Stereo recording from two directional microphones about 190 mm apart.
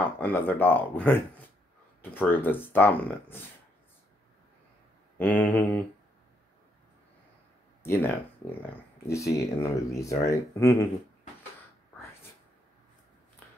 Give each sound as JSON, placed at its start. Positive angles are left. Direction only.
{"t": 0.0, "sound": "speech", "side_deg": 10}
{"t": 5.1, "sound": "speech", "side_deg": 10}
{"t": 7.8, "sound": "speech", "side_deg": 15}
{"t": 13.4, "sound": "a sound", "side_deg": 10}